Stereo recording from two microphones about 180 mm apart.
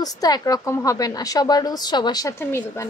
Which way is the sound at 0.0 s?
20° left (ahead or behind).